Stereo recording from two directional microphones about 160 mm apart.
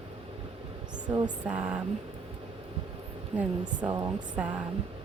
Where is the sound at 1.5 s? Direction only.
10° right (ahead or behind).